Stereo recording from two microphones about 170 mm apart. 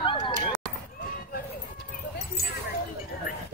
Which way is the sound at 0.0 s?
30° left (ahead or behind).